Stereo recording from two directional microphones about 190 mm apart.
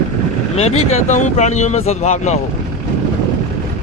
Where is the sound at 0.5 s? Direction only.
35° left (ahead or behind).